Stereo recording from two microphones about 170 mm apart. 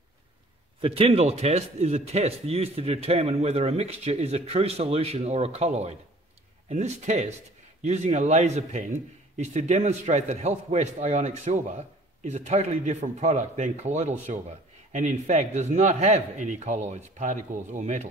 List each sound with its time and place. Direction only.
0.7 s a man's voice: 35° right (ahead or behind)